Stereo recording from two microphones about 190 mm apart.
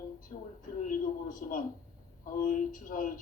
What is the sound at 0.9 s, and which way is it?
Speech, 45° left (ahead or behind).